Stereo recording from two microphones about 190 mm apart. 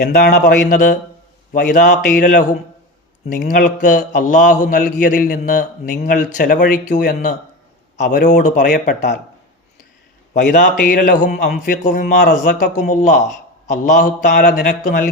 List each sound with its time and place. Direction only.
0.1 s a man's voice: 55° left (ahead or behind)
10.3 s a man's voice: 45° left (ahead or behind)